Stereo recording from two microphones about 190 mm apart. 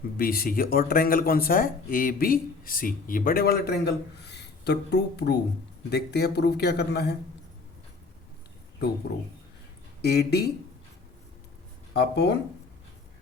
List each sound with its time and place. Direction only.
0.2 s speech: 50° left (ahead or behind)
10.0 s speech: 60° left (ahead or behind)
11.9 s speech: 65° left (ahead or behind)